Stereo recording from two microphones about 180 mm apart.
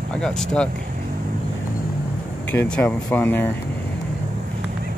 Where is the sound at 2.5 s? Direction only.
10° left (ahead or behind).